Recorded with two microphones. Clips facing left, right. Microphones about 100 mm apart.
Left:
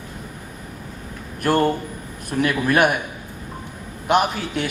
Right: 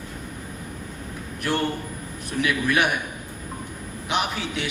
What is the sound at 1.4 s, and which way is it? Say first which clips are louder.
A man's voice: left 7 dB; 45° left (ahead or behind).